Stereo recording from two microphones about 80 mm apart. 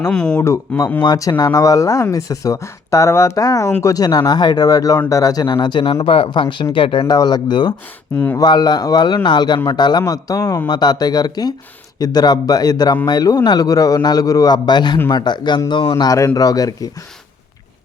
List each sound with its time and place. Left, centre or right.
0.1 s speech: centre
1.0 s speech: left
7.2 s a man's voice: left
10.1 s speech: left
10.7 s a man's voice: left